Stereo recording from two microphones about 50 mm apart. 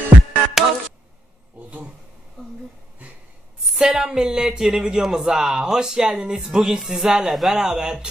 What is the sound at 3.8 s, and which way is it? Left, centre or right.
Speech, centre.